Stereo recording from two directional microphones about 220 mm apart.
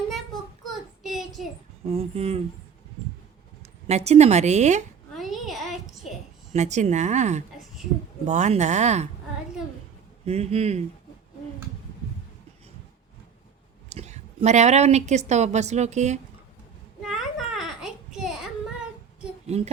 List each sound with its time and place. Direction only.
1.0 s child singing: centre (ahead or behind)
1.9 s a man's voice: 30° right (ahead or behind)
3.8 s a woman's voice: 30° right (ahead or behind)
5.1 s a sound: centre (ahead or behind)
6.5 s a woman's voice: 30° right (ahead or behind)
10.2 s a man's voice: 30° right (ahead or behind)
13.9 s a woman's voice: 30° right (ahead or behind)
17.0 s a sound: centre (ahead or behind)
19.5 s a man's voice: 30° right (ahead or behind)